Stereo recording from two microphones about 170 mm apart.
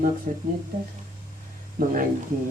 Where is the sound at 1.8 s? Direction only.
55° right (ahead or behind).